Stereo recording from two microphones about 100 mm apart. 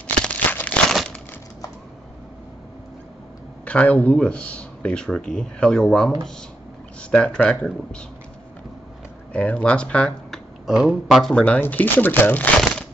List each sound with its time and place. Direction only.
0.0 s crumpling: 15° left (ahead or behind)
0.8 s crumpling: centre (ahead or behind)
3.6 s speech: 15° left (ahead or behind)
9.3 s speech: 10° left (ahead or behind)
10.7 s speech: 5° right (ahead or behind)
11.3 s speech: 15° left (ahead or behind)